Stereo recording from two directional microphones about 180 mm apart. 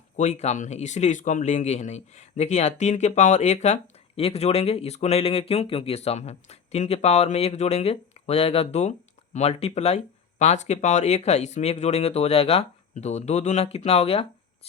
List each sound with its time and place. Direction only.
0.2 s speech: 40° left (ahead or behind)